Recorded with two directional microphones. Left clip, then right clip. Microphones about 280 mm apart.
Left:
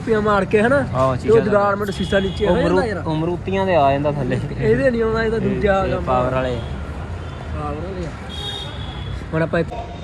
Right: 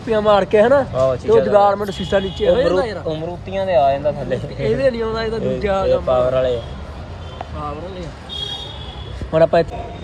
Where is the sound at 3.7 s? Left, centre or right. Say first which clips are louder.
Right 1 dB; centre.